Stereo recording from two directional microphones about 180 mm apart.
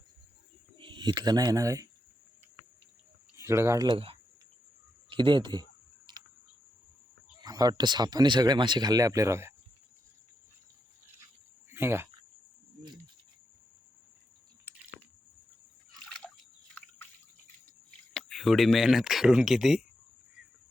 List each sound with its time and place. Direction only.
0.8 s speech: 25° right (ahead or behind)
3.3 s speech: 15° right (ahead or behind)
3.8 s speech: 30° right (ahead or behind)
6.1 s cricket: 25° right (ahead or behind)
7.4 s speech: 20° right (ahead or behind)
11.7 s speech: 15° right (ahead or behind)
16.2 s drip: 5° left (ahead or behind)
18.1 s speech: centre (ahead or behind)